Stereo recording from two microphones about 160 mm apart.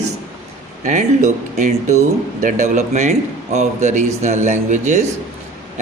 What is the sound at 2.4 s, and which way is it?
A man's voice, 50° right (ahead or behind).